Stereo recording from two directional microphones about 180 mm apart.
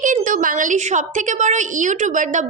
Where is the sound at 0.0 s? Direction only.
45° right (ahead or behind).